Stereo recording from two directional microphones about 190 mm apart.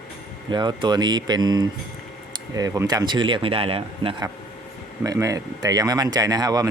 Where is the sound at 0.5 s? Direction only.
25° right (ahead or behind).